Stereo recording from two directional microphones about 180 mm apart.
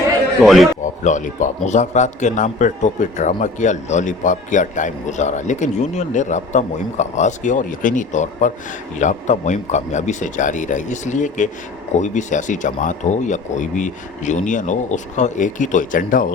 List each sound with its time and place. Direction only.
0.4 s a man's voice: centre (ahead or behind)
1.0 s a man's voice: 45° left (ahead or behind)